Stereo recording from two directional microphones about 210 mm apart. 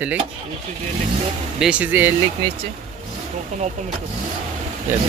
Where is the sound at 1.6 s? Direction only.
5° right (ahead or behind).